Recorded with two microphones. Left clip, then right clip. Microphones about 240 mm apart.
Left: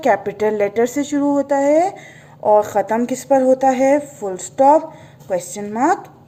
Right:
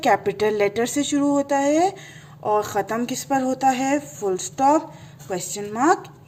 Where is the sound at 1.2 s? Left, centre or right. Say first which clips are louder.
Left 4 dB; right.